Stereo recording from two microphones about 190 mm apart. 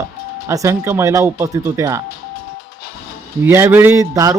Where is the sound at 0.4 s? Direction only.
15° right (ahead or behind).